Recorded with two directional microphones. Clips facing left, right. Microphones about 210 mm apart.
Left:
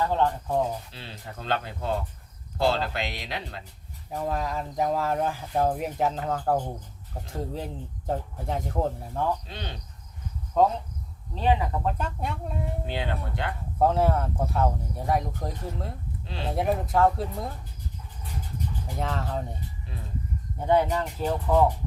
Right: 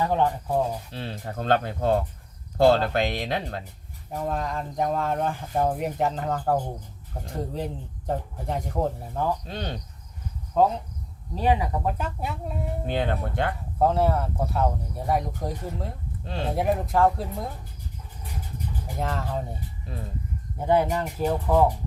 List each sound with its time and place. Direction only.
0.0 s speech: 15° right (ahead or behind)
0.9 s speech: 50° right (ahead or behind)
4.1 s speech: 5° left (ahead or behind)
9.5 s speech: 45° right (ahead or behind)
10.5 s speech: centre (ahead or behind)
11.3 s speech: 15° right (ahead or behind)
12.8 s speech: 45° right (ahead or behind)
13.7 s speech: centre (ahead or behind)
18.9 s speech: centre (ahead or behind)
20.7 s speech: 10° right (ahead or behind)